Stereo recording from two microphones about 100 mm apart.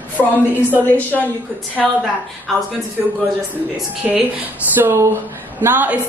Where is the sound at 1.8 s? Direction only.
5° left (ahead or behind).